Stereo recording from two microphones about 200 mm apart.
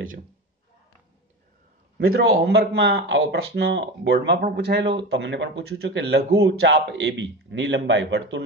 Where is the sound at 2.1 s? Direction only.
55° right (ahead or behind).